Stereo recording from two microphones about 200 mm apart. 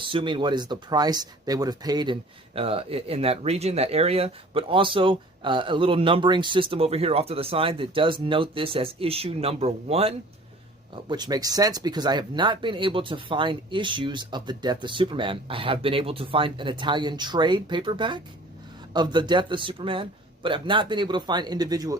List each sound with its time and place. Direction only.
0.0 s speech: 25° right (ahead or behind)